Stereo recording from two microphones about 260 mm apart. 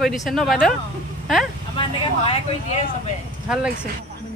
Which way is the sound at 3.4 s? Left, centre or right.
Centre.